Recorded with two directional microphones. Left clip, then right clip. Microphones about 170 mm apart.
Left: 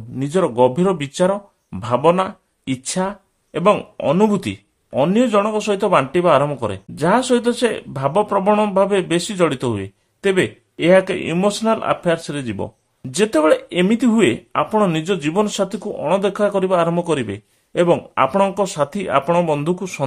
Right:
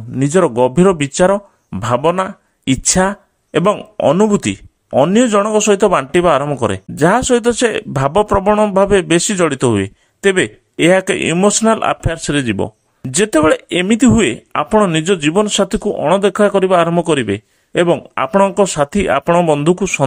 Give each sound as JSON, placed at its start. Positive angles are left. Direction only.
{"t": 0.1, "sound": "speech", "side_deg": -40}